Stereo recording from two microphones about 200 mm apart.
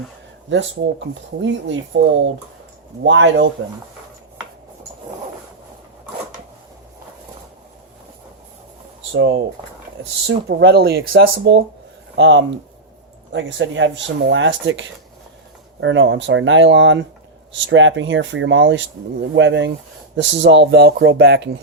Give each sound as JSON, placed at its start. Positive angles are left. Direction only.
{"t": 0.5, "sound": "speech", "side_deg": -70}
{"t": 9.1, "sound": "speech", "side_deg": -65}